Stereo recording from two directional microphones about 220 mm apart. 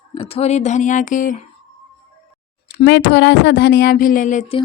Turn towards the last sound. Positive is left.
turn(degrees=35)  # may be behind; listen again after turning